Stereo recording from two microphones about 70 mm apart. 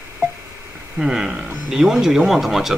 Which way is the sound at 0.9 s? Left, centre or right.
Centre.